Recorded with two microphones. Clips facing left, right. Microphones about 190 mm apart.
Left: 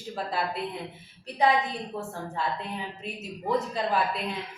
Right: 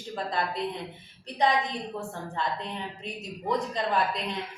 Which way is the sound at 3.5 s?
5° left (ahead or behind).